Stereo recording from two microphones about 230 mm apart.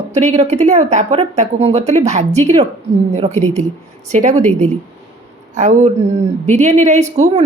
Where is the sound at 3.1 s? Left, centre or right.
Right.